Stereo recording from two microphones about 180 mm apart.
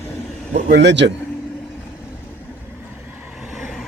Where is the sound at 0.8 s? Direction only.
75° right (ahead or behind).